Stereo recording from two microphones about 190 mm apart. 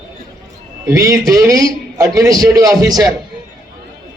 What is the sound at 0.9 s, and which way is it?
A man's voice, 15° right (ahead or behind).